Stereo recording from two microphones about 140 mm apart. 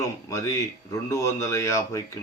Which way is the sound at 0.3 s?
20° left (ahead or behind).